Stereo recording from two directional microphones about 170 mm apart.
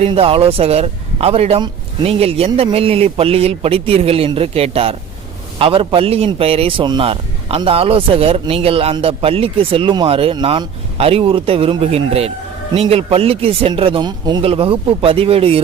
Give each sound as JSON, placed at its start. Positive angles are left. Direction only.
{"t": 0.0, "sound": "a man's voice", "side_deg": -35}